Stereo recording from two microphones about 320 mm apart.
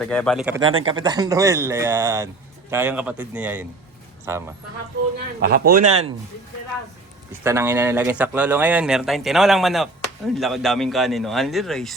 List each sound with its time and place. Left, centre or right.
0.0 s speech: centre
5.4 s a man's voice: right
7.4 s speech: centre